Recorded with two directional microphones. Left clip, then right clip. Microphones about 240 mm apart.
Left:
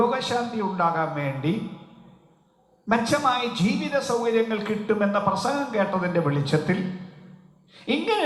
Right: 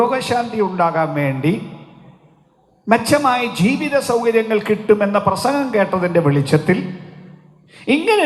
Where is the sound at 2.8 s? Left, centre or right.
Right.